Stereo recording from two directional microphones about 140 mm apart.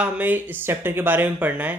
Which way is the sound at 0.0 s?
10° right (ahead or behind).